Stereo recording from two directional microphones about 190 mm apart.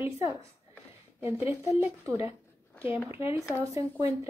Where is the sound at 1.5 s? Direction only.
15° right (ahead or behind).